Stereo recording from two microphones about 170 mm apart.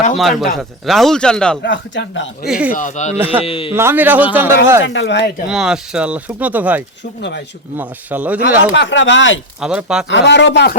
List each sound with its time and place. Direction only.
0.2 s a man's voice: centre (ahead or behind)
1.6 s speech: 90° left
2.5 s speech: 5° right (ahead or behind)
2.7 s speech: 45° left (ahead or behind)
3.2 s speech: 10° right (ahead or behind)
3.4 s a man's voice: 35° left (ahead or behind)
3.7 s speech: 10° right (ahead or behind)
4.8 s speech: 90° left
5.5 s speech: 5° right (ahead or behind)
7.2 s speech: 90° left
7.8 s speech: 10° right (ahead or behind)
8.7 s speech: 90° left
9.6 s a man's voice: 5° right (ahead or behind)
10.1 s speech: 90° left